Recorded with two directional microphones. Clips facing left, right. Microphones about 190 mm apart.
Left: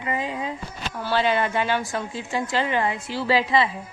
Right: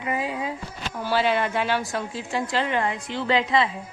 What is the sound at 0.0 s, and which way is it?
A woman's voice, 10° right (ahead or behind).